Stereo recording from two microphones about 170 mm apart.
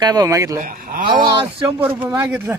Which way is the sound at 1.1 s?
25° right (ahead or behind).